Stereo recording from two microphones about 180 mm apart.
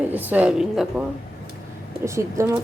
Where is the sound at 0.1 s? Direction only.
10° right (ahead or behind).